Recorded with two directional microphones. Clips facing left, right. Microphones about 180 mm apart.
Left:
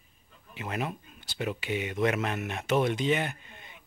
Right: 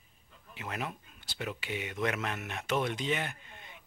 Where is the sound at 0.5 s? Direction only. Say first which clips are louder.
Left 5 dB; 10° left (ahead or behind).